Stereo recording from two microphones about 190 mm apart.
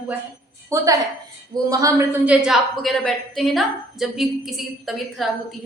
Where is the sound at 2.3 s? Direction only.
Centre (ahead or behind).